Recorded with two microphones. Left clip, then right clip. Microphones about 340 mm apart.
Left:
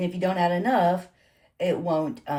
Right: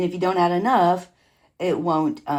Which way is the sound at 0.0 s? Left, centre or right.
Centre.